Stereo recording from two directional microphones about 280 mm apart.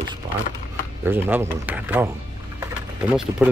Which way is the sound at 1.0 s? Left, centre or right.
Centre.